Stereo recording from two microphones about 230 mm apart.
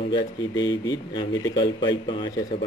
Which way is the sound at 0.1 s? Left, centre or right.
Centre.